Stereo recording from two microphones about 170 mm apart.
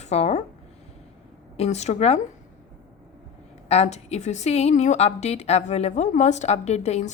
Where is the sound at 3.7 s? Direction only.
40° left (ahead or behind).